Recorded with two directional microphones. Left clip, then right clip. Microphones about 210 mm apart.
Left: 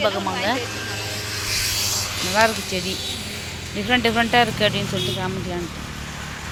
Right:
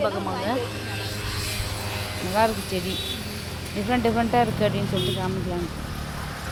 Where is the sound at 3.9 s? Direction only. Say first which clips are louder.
Left 4 dB; 5° right (ahead or behind).